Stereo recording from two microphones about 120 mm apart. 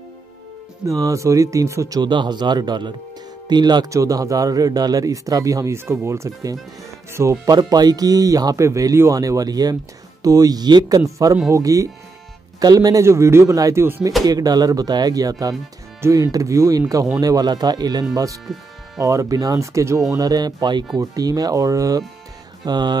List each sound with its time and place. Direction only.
0.8 s speech: 25° right (ahead or behind)
7.5 s speech: 35° right (ahead or behind)
14.2 s speech: 30° right (ahead or behind)